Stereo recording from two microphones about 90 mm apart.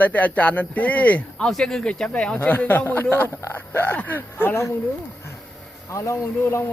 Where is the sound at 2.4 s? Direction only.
20° left (ahead or behind).